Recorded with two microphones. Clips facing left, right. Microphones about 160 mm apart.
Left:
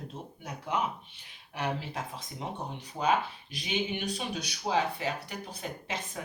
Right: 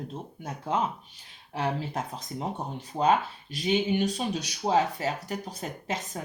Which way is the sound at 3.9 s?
40° right (ahead or behind).